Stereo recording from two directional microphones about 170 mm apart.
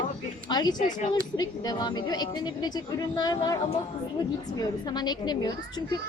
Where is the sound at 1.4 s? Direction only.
25° left (ahead or behind).